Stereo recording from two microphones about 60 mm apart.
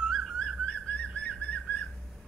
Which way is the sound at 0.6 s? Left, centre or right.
Centre.